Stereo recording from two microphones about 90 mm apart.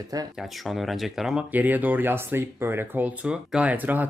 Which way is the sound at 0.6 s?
Centre (ahead or behind).